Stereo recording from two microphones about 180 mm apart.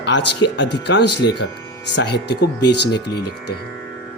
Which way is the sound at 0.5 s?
75° left (ahead or behind).